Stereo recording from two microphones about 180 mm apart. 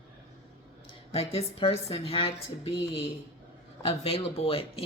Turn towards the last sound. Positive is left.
turn(degrees=30)  # may be behind; listen again after turning